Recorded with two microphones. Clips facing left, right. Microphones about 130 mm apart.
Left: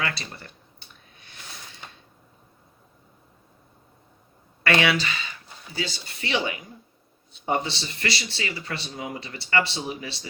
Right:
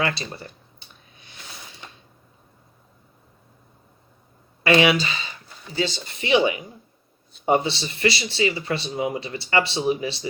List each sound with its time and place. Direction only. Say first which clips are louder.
0.0 s speech: right 5 dB; 25° right (ahead or behind)
4.6 s speech: right 5 dB; 20° right (ahead or behind)